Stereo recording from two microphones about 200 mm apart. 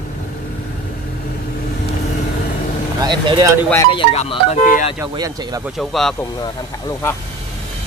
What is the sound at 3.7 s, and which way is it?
Speech, 20° left (ahead or behind).